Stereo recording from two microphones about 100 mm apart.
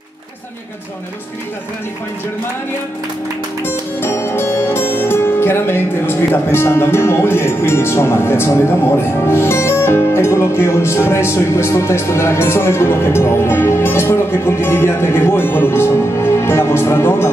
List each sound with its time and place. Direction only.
3.6 s music: 25° left (ahead or behind)